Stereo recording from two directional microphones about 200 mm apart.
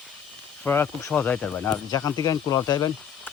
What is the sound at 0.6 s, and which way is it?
Speech, 10° left (ahead or behind).